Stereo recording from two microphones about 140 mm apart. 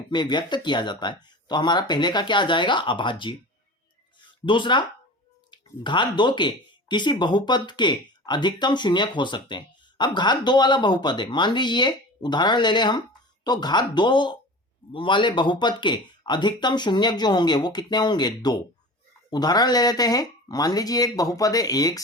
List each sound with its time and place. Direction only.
0.1 s speech: 30° left (ahead or behind)
4.4 s speech: 35° left (ahead or behind)